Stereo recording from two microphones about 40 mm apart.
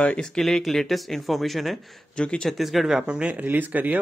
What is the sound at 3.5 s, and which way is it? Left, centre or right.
Speech, right.